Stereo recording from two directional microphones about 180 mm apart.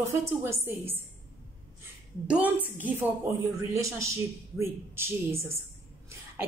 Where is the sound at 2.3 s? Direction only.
10° right (ahead or behind).